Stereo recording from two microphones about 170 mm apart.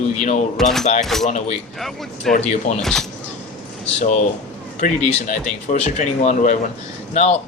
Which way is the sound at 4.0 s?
45° left (ahead or behind).